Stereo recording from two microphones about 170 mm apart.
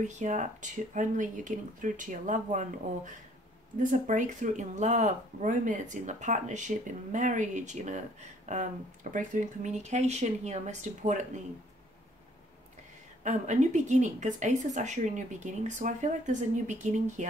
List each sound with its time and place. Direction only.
0.0 s speech: 45° right (ahead or behind)
13.2 s speech: 45° right (ahead or behind)